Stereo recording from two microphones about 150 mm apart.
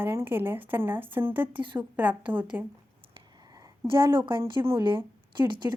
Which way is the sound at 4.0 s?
15° right (ahead or behind).